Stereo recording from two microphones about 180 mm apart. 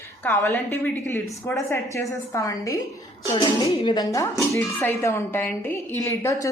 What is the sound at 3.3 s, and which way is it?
Speech, 30° left (ahead or behind).